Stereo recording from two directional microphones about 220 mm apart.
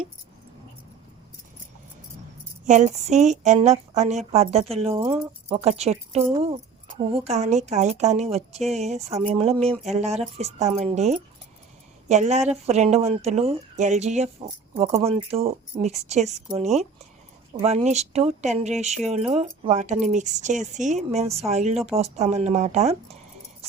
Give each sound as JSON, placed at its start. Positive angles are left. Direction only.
{"t": 2.6, "sound": "speech", "side_deg": -30}